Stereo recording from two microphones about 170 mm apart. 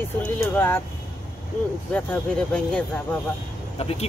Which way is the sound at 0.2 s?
10° left (ahead or behind).